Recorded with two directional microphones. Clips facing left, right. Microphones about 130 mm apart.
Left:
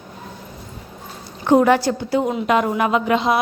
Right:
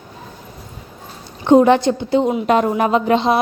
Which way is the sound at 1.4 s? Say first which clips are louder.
Right 3 dB; 25° right (ahead or behind).